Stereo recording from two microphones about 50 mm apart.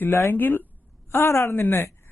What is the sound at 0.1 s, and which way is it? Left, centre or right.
Speech, left.